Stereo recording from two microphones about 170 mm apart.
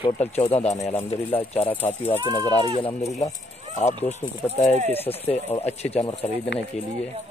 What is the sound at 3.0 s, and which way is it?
Speech, 20° left (ahead or behind).